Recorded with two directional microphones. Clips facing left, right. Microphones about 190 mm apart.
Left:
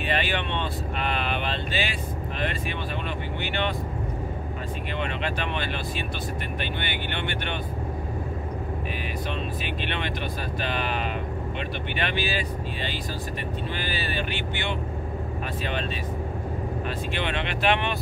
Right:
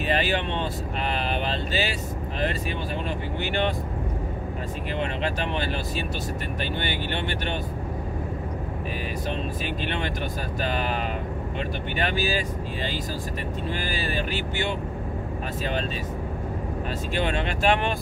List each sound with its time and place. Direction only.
0.1 s vehicle: 40° right (ahead or behind)
5.2 s speech: 40° right (ahead or behind)
9.8 s speech: 40° right (ahead or behind)
12.0 s speech: 40° right (ahead or behind)
17.1 s speech: 40° right (ahead or behind)